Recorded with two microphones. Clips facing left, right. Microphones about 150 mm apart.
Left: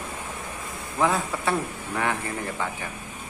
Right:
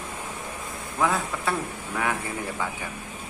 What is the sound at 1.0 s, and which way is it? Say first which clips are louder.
A man's voice: left 1 dB; centre (ahead or behind).